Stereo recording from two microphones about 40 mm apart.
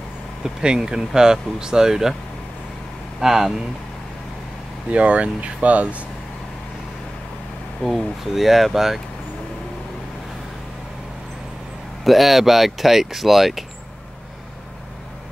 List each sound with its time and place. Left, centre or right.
0.4 s speech: centre
3.2 s speech: centre
4.9 s speech: right
7.8 s speech: centre
12.0 s speech: centre